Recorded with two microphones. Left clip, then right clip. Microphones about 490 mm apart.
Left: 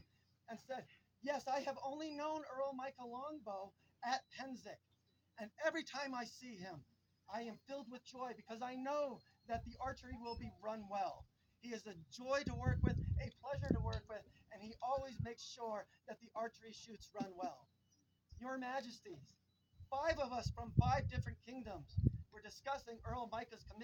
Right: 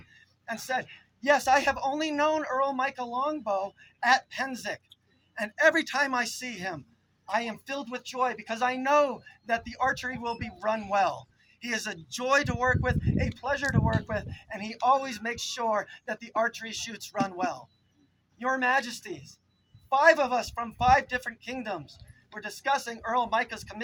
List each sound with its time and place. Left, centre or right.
0.4 s speech: left